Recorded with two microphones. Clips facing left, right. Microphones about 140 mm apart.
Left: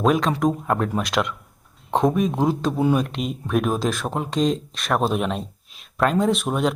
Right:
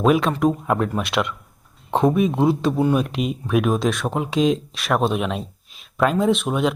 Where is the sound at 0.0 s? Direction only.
5° right (ahead or behind).